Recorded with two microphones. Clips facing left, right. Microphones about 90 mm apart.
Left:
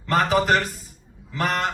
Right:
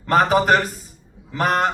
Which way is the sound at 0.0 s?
40° right (ahead or behind).